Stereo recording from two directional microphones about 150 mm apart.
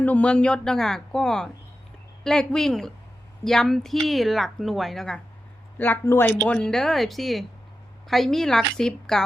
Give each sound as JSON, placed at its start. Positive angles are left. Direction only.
{"t": 0.0, "sound": "a woman's voice", "side_deg": 10}